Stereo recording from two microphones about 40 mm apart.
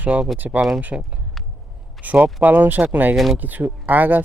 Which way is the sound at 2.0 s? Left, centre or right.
Right.